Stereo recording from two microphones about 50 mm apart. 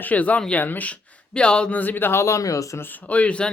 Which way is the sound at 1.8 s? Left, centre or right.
Left.